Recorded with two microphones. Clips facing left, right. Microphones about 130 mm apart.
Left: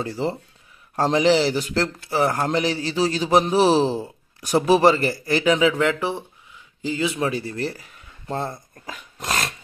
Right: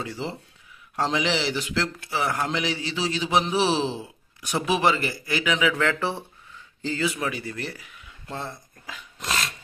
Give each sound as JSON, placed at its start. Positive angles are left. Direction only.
{"t": 0.0, "sound": "speech", "side_deg": 40}
{"t": 5.7, "sound": "a man's voice", "side_deg": 20}
{"t": 7.1, "sound": "speech", "side_deg": 30}